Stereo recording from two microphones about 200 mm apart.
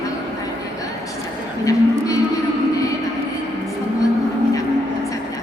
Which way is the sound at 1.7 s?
15° left (ahead or behind).